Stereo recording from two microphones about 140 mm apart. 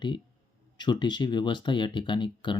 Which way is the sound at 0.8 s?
30° left (ahead or behind).